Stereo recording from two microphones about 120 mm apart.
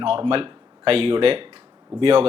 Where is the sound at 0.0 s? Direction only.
50° right (ahead or behind).